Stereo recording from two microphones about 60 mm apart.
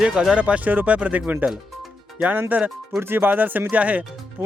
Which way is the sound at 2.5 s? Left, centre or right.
Right.